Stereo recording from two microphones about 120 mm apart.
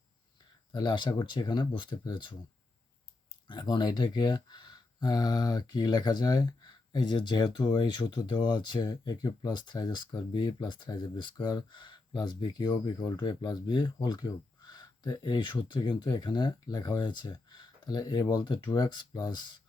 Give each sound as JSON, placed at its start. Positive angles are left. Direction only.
{"t": 0.7, "sound": "speech", "side_deg": 35}
{"t": 3.4, "sound": "speech", "side_deg": 40}